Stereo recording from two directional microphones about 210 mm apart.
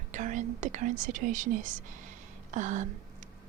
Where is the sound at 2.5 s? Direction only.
35° right (ahead or behind).